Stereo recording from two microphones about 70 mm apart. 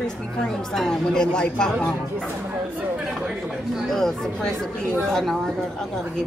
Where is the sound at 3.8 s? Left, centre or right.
Centre.